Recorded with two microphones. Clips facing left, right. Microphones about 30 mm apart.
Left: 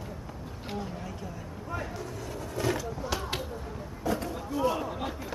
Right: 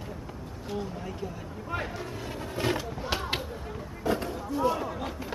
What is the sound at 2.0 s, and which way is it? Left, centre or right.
Vehicle, right.